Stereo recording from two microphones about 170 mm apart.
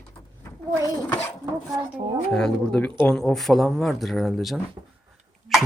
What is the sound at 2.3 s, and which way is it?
Speech, 5° left (ahead or behind).